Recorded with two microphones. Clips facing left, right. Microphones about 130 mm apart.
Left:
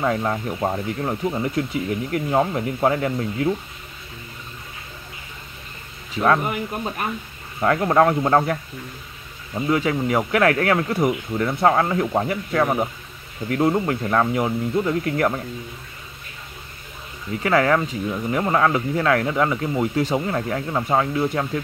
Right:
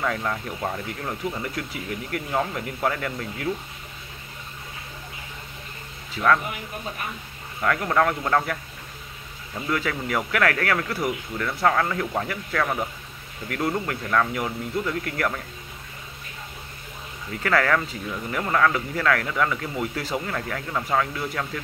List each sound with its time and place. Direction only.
0.0 s speech: 30° left (ahead or behind)
7.6 s speech: 30° left (ahead or behind)
9.6 s speech: 25° left (ahead or behind)
17.4 s speech: 20° left (ahead or behind)